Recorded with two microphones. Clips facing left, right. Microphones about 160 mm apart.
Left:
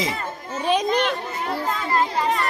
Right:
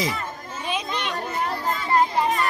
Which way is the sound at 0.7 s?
40° left (ahead or behind).